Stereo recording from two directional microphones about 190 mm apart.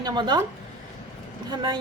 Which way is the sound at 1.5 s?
25° right (ahead or behind).